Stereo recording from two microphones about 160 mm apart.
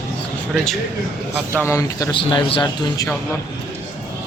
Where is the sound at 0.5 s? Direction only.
Centre (ahead or behind).